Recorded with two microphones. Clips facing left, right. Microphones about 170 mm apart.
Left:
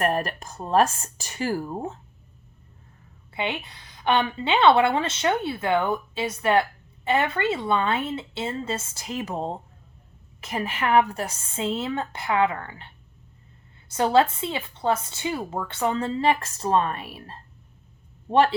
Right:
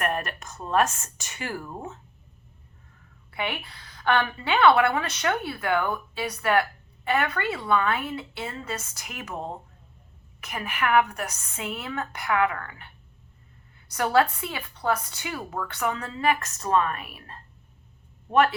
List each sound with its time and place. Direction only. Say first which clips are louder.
0.0 s speech: left 4 dB; 35° left (ahead or behind)
3.3 s a woman's voice: left 2 dB; 20° left (ahead or behind)